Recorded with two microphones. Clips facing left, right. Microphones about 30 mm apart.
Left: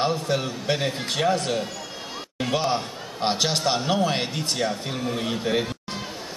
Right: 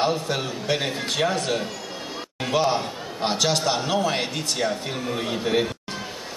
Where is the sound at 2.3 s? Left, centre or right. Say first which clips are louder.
Right 2 dB; centre.